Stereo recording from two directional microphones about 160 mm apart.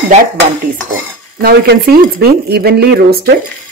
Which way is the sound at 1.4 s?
75° right (ahead or behind).